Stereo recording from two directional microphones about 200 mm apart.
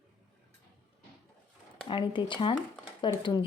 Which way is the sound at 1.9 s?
25° left (ahead or behind).